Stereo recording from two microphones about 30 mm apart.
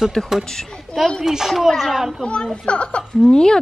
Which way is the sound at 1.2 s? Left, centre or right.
Centre.